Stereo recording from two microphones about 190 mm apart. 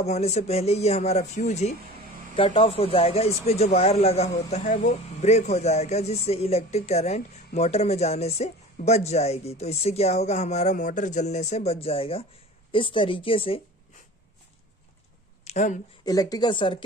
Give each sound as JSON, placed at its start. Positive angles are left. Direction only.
{"t": 0.0, "sound": "speech", "side_deg": 35}
{"t": 15.4, "sound": "speech", "side_deg": 40}
{"t": 16.1, "sound": "speech", "side_deg": 20}